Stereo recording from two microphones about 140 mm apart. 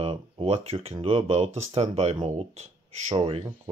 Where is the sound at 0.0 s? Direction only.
45° right (ahead or behind).